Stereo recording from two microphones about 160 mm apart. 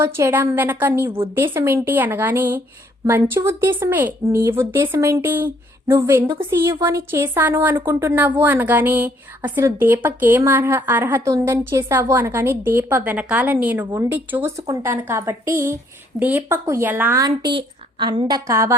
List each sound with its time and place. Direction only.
0.0 s a woman's voice: 15° right (ahead or behind)
17.2 s a woman's voice: 30° right (ahead or behind)